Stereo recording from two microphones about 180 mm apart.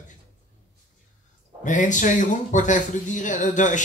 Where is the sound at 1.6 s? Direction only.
45° left (ahead or behind).